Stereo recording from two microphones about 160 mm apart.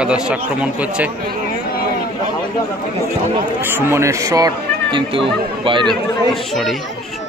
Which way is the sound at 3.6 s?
15° right (ahead or behind).